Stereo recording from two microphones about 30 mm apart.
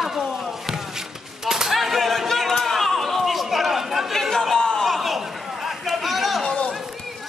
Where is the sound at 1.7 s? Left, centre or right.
Centre.